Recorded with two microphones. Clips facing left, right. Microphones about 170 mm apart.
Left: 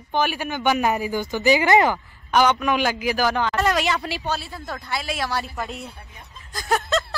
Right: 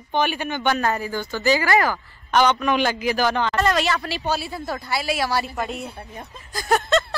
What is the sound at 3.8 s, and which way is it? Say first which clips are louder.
Speech: even; 15° left (ahead or behind).